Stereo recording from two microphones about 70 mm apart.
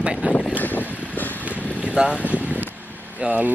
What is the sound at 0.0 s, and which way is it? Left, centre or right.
Vehicle, centre.